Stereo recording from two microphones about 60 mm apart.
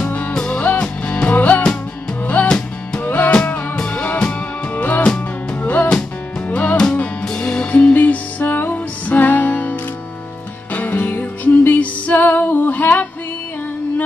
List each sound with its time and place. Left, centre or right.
0.3 s music: centre
0.6 s music: left
3.7 s music: centre
5.6 s music: left
7.9 s music: left